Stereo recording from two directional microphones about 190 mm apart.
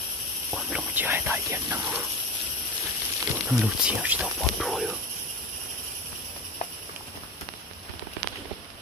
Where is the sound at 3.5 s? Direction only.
5° right (ahead or behind).